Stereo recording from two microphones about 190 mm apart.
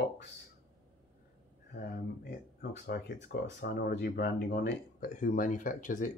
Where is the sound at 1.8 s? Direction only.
50° left (ahead or behind).